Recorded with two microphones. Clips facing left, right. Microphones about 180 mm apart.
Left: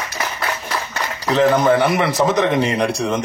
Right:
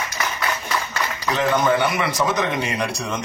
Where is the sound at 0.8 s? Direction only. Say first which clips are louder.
Left 1 dB; 30° left (ahead or behind).